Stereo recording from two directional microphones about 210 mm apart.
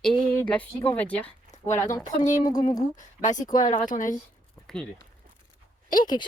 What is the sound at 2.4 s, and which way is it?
Speech, 20° left (ahead or behind).